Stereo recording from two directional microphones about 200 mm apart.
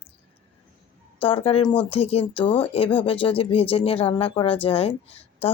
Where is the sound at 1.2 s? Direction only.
25° left (ahead or behind).